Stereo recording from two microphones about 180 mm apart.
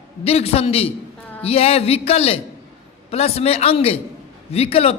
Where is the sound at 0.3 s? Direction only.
35° left (ahead or behind).